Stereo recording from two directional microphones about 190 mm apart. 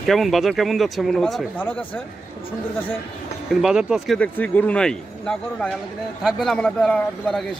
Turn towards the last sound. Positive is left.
turn(degrees=5)  # may be behind; listen again after turning